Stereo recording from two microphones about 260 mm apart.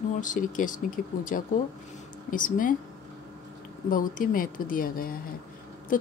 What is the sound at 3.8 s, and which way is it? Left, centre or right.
Speech, left.